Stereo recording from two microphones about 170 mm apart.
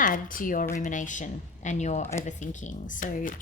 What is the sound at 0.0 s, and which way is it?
Speech, 55° left (ahead or behind).